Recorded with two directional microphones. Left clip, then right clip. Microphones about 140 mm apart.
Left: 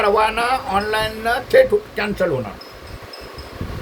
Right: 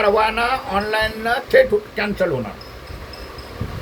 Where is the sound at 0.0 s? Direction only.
15° left (ahead or behind).